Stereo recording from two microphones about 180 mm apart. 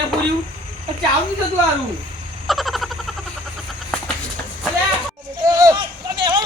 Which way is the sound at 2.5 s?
Centre (ahead or behind).